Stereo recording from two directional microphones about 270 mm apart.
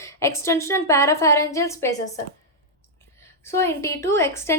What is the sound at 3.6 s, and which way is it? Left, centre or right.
Speech, centre.